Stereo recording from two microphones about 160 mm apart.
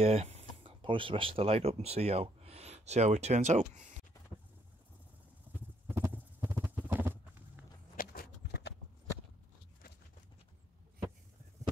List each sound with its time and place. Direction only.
0.0 s speech: 40° right (ahead or behind)
5.5 s clip-clop: 15° right (ahead or behind)
7.9 s a sound: 65° left (ahead or behind); by 8.7 s 80° left